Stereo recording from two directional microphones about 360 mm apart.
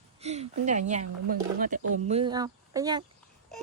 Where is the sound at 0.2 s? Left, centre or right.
Centre.